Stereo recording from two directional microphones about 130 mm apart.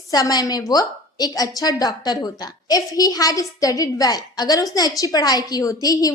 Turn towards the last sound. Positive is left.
turn(degrees=30)  # may be behind; listen again after turning